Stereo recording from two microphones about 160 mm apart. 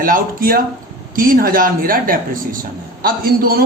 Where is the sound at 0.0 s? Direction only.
65° right (ahead or behind).